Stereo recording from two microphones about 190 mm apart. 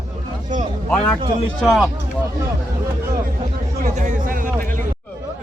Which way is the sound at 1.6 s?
Centre (ahead or behind).